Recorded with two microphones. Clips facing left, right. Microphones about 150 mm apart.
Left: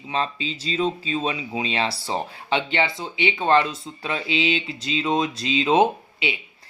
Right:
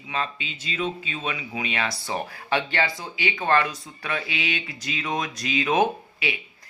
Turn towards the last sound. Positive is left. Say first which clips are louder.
# left 3 dB
turn(degrees=25)  # may be behind; listen again after turning